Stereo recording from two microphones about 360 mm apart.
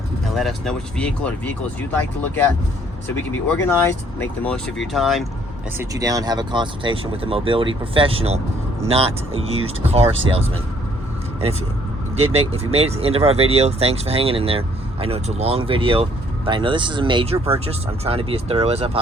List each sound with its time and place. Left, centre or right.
0.3 s speech: centre
3.7 s speech: centre
12.1 s speech: centre